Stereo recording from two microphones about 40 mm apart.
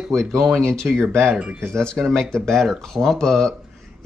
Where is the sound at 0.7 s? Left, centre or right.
Centre.